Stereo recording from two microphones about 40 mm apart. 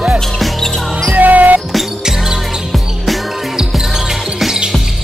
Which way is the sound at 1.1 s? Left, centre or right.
Right.